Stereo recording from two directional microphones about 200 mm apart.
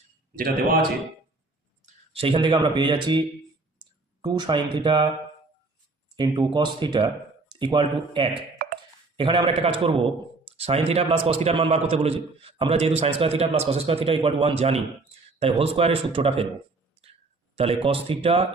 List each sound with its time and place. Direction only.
0.3 s a man's voice: 45° right (ahead or behind)
2.1 s a man's voice: 25° right (ahead or behind)
6.1 s a man's voice: 20° right (ahead or behind)
17.0 s a sound: 30° right (ahead or behind)